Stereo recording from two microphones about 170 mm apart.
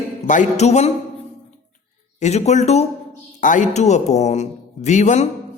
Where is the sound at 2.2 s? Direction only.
40° left (ahead or behind).